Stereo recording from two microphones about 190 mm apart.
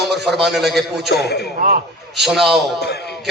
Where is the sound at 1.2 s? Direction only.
60° left (ahead or behind).